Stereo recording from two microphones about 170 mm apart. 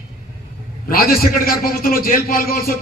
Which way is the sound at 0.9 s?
60° left (ahead or behind).